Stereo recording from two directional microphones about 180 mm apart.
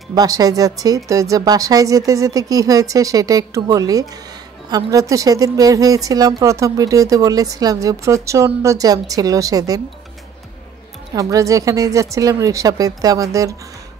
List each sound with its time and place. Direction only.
0.1 s a woman's voice: 20° right (ahead or behind)
11.1 s a woman's voice: 20° right (ahead or behind)